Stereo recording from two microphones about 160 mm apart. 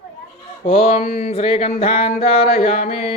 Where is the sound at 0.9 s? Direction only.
40° left (ahead or behind).